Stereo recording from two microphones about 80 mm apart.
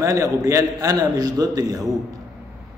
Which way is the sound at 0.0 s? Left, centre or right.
Right.